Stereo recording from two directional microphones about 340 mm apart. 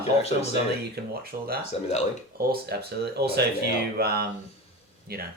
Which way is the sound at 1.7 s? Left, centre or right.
Centre.